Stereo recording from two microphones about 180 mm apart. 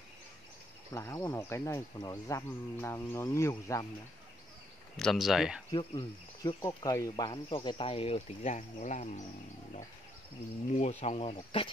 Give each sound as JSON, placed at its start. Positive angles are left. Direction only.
{"t": 0.9, "sound": "speech", "side_deg": 15}
{"t": 4.9, "sound": "speech", "side_deg": 0}
{"t": 5.7, "sound": "speech", "side_deg": 25}
{"t": 10.8, "sound": "speech", "side_deg": 35}